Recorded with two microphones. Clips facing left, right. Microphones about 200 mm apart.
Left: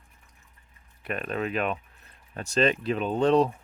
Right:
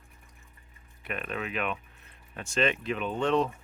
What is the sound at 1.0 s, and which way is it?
Speech, 40° left (ahead or behind).